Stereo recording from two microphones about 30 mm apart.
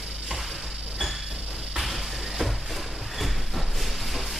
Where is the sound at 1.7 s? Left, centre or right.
Centre.